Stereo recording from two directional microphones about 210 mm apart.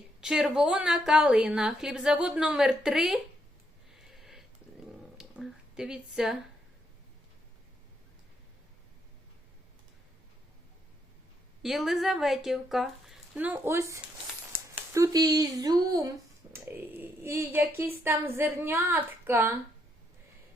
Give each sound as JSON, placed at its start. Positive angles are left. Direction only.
{"t": 0.2, "sound": "a woman's voice", "side_deg": -5}
{"t": 4.0, "sound": "a sound", "side_deg": 0}
{"t": 11.6, "sound": "a woman's voice", "side_deg": 0}